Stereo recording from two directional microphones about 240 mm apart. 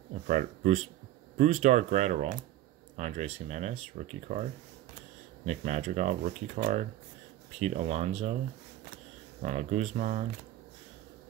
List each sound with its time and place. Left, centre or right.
0.3 s speech: right
5.4 s speech: right
9.4 s speech: right